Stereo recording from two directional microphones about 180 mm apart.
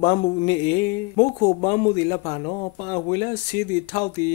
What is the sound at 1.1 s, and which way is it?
A man's voice, 45° left (ahead or behind).